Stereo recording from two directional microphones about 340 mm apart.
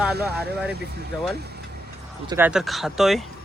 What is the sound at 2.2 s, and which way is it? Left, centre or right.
Speech, centre.